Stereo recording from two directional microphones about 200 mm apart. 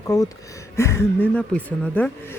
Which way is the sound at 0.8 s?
15° left (ahead or behind).